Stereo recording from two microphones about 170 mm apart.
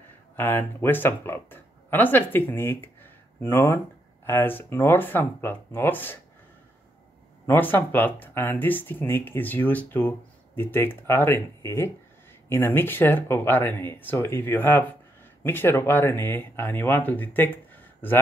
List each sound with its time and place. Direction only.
0.4 s speech: 10° left (ahead or behind)
7.4 s speech: 10° left (ahead or behind)